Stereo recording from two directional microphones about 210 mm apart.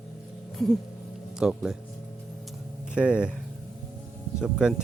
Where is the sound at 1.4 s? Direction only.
5° right (ahead or behind).